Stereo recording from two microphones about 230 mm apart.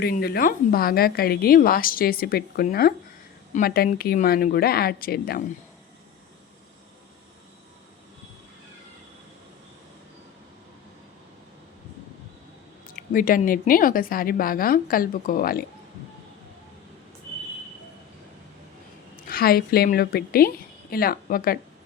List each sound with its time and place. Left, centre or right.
0.0 s a woman's voice: left
13.0 s a woman's voice: left
19.3 s a woman's voice: left